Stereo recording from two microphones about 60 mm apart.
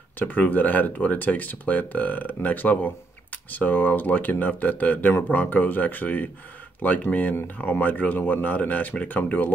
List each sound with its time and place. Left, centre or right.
0.2 s speech: left